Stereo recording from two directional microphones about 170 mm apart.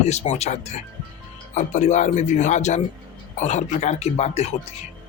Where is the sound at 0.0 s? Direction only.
40° left (ahead or behind).